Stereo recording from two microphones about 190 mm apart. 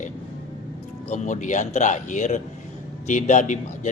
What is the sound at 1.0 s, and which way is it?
A man's voice, 40° left (ahead or behind).